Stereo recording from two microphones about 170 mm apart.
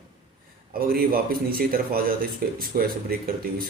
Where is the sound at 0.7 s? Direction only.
60° right (ahead or behind).